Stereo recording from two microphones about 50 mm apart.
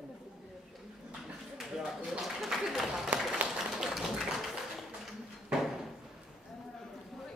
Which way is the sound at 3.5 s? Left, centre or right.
Centre.